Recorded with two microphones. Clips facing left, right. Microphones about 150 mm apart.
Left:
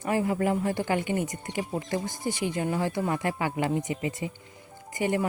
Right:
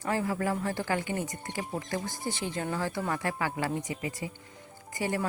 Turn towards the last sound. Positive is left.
turn(degrees=20)  # may be behind; listen again after turning